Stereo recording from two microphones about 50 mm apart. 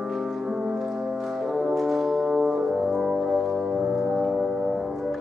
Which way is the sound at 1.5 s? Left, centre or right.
Centre.